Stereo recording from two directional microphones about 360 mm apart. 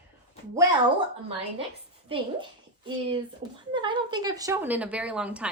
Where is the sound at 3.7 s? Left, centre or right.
Centre.